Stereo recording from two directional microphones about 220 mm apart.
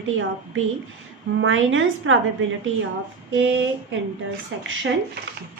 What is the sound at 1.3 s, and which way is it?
Speech, 60° right (ahead or behind).